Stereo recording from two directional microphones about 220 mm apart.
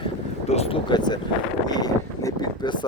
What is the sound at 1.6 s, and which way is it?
Wind noise, 15° left (ahead or behind).